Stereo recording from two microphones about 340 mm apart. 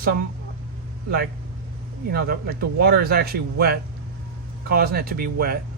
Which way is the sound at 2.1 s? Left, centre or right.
Right.